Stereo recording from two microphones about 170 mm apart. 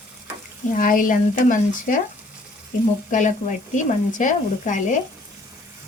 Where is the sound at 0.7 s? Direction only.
55° left (ahead or behind).